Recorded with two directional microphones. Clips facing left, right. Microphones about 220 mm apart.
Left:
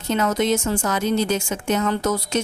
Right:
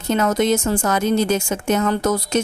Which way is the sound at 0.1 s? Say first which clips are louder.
Right 3 dB; 50° right (ahead or behind).